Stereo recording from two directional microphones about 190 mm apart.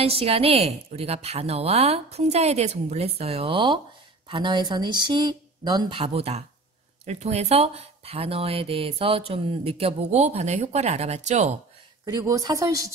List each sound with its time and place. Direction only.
0.0 s speech: 30° right (ahead or behind)
12.0 s speech: 20° right (ahead or behind)